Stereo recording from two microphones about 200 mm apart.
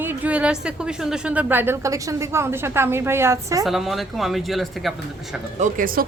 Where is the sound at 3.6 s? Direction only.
Centre (ahead or behind).